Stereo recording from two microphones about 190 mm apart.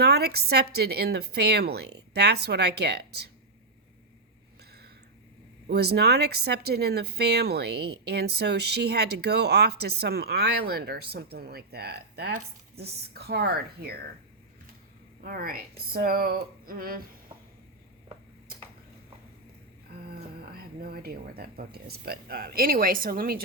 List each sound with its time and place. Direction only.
0.0 s speech: 55° right (ahead or behind)
5.6 s speech: 55° right (ahead or behind)
15.2 s speech: 50° right (ahead or behind)
20.1 s speech: 55° right (ahead or behind)